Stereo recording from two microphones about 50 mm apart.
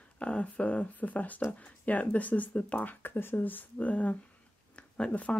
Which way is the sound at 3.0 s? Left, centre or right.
Left.